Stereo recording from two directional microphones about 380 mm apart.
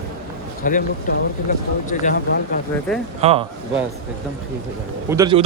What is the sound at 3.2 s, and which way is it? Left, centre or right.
Speech, centre.